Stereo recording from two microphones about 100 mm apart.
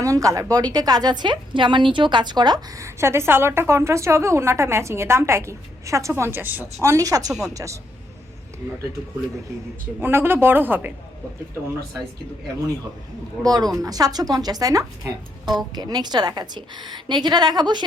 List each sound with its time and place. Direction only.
0.0 s a woman's voice: 35° right (ahead or behind)
2.7 s a woman's voice: 30° right (ahead or behind)
6.8 s speech: 35° right (ahead or behind)
10.0 s a woman's voice: 25° right (ahead or behind)
13.4 s a woman's voice: 40° right (ahead or behind)